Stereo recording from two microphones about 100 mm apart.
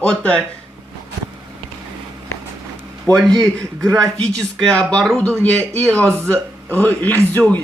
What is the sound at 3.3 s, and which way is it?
Speech, 30° right (ahead or behind).